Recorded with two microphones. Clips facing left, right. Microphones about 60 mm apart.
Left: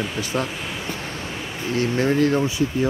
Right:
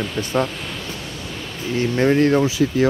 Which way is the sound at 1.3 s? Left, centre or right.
Centre.